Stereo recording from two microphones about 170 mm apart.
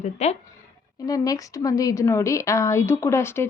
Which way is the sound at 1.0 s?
20° left (ahead or behind).